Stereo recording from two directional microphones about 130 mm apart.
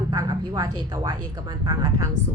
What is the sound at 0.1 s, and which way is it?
Speech, 30° right (ahead or behind).